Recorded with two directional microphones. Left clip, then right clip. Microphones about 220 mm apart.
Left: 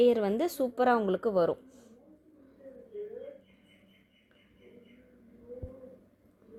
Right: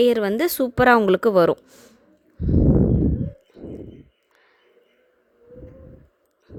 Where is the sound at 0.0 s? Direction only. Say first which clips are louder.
Right 7 dB; 30° right (ahead or behind).